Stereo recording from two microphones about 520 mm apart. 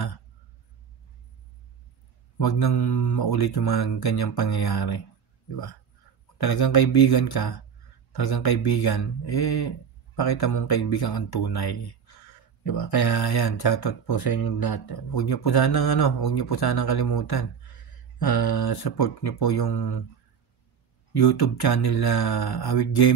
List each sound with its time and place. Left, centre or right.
2.3 s speech: left
6.3 s speech: left
21.1 s speech: left